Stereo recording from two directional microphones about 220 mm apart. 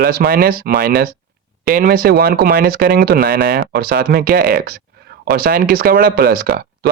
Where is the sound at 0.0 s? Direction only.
40° right (ahead or behind).